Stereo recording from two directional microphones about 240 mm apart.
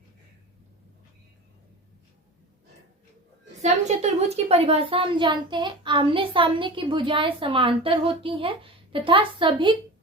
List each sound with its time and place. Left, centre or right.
3.6 s a woman's voice: right